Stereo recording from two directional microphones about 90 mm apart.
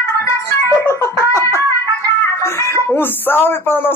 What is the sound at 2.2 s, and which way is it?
Speech, 30° left (ahead or behind).